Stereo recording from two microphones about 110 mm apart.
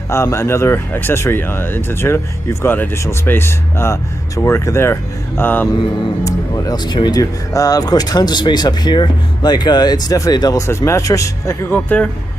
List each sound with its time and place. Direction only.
0.1 s speech: 25° left (ahead or behind)
6.2 s speech: 35° left (ahead or behind)
11.7 s speech: 15° left (ahead or behind)